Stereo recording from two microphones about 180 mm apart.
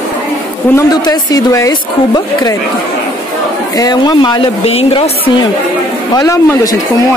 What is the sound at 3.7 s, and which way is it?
Speech, 20° left (ahead or behind).